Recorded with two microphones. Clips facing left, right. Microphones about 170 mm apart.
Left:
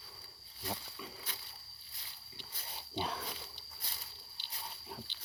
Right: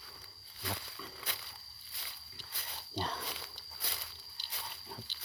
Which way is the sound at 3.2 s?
75° right (ahead or behind).